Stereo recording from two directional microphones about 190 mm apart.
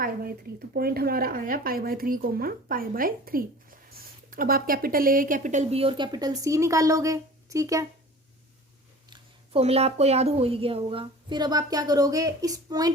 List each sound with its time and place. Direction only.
0.0 s speech: 55° right (ahead or behind); by 7.9 s 15° right (ahead or behind)
9.0 s speech: 25° right (ahead or behind)